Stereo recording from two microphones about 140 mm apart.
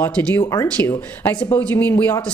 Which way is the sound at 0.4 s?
25° left (ahead or behind).